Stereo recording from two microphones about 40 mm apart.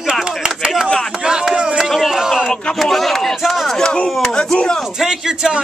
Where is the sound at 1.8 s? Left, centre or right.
Centre.